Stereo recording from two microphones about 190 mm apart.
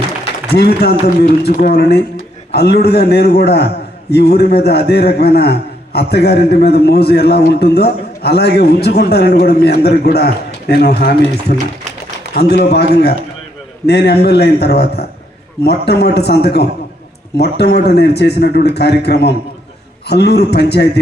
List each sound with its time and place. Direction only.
0.4 s a man's voice: 55° left (ahead or behind)